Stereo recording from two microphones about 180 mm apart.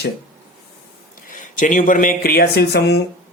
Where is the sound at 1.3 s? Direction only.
45° left (ahead or behind).